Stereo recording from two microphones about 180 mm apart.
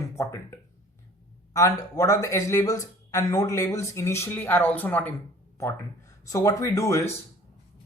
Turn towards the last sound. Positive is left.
turn(degrees=15)  # may be behind; listen again after turning